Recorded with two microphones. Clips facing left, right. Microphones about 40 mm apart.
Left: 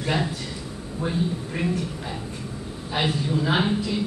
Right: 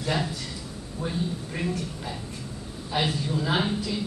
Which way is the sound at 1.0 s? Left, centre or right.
Centre.